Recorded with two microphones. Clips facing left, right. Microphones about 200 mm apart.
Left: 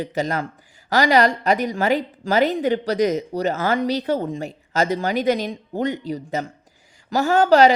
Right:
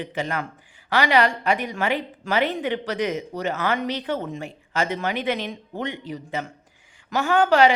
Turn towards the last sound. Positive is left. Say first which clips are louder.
# left 3 dB
turn(degrees=40)  # may be behind; listen again after turning